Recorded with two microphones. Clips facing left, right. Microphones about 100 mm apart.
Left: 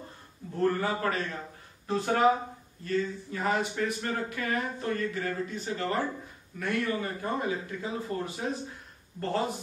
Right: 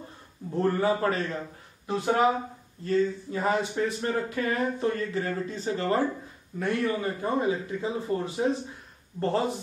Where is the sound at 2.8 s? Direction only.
25° right (ahead or behind).